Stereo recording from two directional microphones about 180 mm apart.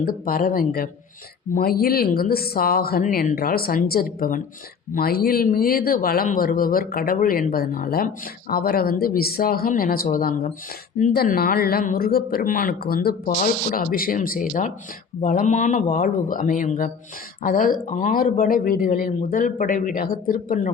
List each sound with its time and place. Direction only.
0.0 s speech: 55° left (ahead or behind)